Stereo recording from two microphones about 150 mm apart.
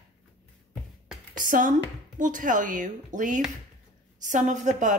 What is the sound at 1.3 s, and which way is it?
A woman's voice, 65° right (ahead or behind).